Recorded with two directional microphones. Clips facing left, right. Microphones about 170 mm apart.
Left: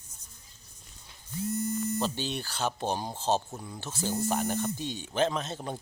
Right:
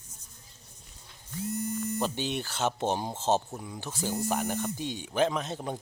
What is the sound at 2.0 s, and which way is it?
Speech, 15° right (ahead or behind).